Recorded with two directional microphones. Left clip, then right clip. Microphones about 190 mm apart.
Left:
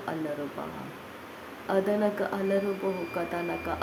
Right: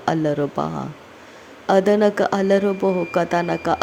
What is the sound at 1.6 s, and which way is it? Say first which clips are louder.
Speech: right 11 dB; 45° right (ahead or behind).